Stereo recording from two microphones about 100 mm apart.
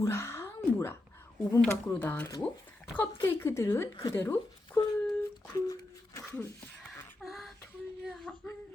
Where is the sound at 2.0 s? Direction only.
20° left (ahead or behind).